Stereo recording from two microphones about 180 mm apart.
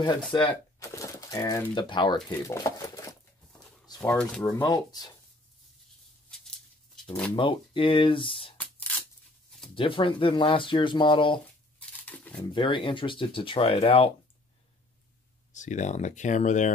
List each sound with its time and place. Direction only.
0.3 s speech: 25° left (ahead or behind)
2.2 s crumpling: 20° left (ahead or behind)
3.8 s a sound: 20° left (ahead or behind)
4.1 s speech: 5° left (ahead or behind)
6.3 s a sound: centre (ahead or behind)
7.3 s speech: 30° left (ahead or behind)
8.5 s tearing: 10° left (ahead or behind)
9.8 s speech: 30° left (ahead or behind)
12.0 s a sound: 5° left (ahead or behind)
12.4 s speech: 30° left (ahead or behind)
15.5 s speech: 40° left (ahead or behind)